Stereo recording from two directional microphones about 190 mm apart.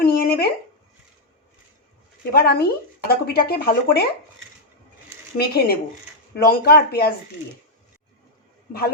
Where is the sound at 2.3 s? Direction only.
55° left (ahead or behind).